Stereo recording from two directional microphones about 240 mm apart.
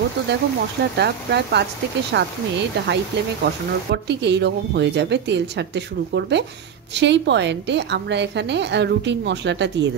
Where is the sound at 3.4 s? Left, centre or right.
Right.